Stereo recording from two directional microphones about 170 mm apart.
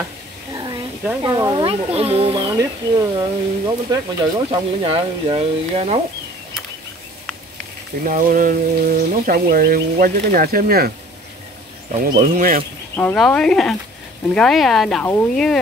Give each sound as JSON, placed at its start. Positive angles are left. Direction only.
{"t": 0.5, "sound": "a sound", "side_deg": -25}
{"t": 1.2, "sound": "speech", "side_deg": -20}
{"t": 2.3, "sound": "speech", "side_deg": -25}
{"t": 8.0, "sound": "speech", "side_deg": -50}
{"t": 12.2, "sound": "speech", "side_deg": -50}
{"t": 12.9, "sound": "speech", "side_deg": 5}